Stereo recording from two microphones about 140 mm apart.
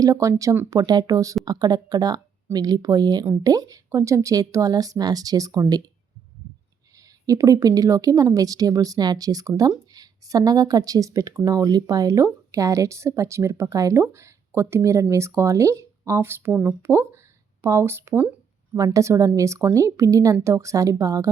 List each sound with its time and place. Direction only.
0.0 s speech: 25° right (ahead or behind)
7.3 s speech: 25° right (ahead or behind)